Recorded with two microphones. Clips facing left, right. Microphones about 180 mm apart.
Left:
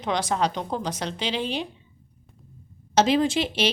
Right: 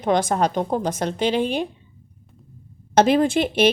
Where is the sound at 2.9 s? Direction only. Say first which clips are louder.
Right 4 dB; 55° right (ahead or behind).